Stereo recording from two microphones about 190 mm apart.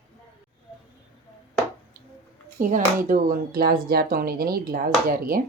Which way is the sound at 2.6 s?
45° right (ahead or behind).